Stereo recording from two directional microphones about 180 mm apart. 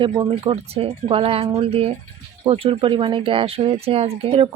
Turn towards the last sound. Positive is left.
turn(degrees=-35)  # may be behind; listen again after turning